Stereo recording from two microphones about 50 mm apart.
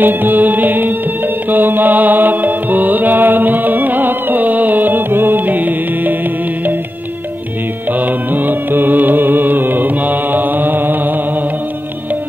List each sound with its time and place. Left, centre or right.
0.0 s music: right
7.9 s music: right